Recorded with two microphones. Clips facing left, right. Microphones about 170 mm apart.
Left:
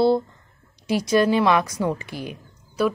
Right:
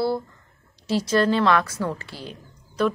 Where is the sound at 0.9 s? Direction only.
15° left (ahead or behind).